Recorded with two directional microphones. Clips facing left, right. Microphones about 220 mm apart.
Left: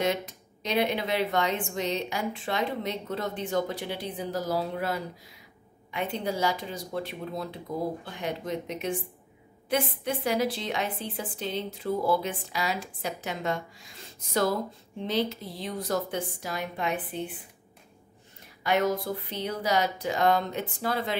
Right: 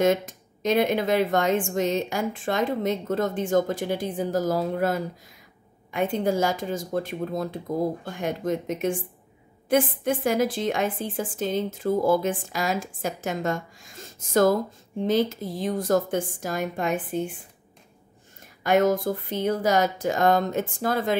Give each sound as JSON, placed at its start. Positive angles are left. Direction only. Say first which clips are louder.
{"t": 0.0, "sound": "a woman's voice", "louder": "right 7 dB", "side_deg": -45}
{"t": 18.6, "sound": "a woman's voice", "louder": "right 5 dB", "side_deg": -45}